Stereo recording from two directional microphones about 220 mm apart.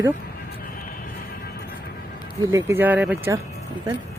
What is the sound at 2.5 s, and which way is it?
Speech, 10° right (ahead or behind).